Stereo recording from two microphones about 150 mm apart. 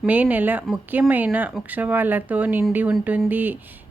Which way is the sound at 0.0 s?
10° right (ahead or behind).